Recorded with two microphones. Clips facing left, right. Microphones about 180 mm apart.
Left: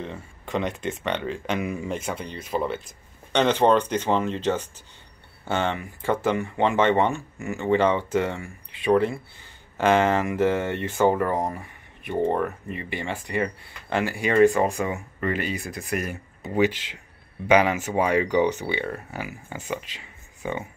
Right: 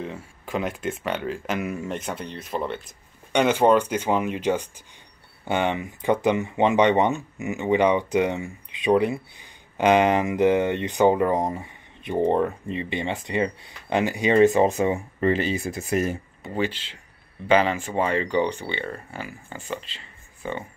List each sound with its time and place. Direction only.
0.0 s speech: 5° right (ahead or behind)
3.3 s speech: 10° right (ahead or behind); by 16.2 s 25° right (ahead or behind)
16.4 s speech: 10° left (ahead or behind)